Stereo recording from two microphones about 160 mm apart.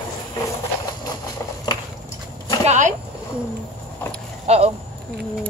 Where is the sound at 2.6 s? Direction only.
50° right (ahead or behind).